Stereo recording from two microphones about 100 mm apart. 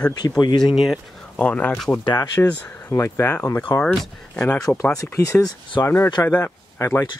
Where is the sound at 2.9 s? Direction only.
25° left (ahead or behind).